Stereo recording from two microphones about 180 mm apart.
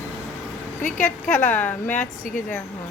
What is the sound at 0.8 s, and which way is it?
Speech, 45° left (ahead or behind).